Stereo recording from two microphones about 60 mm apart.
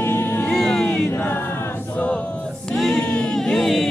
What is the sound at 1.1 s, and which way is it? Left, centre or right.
Choir, left.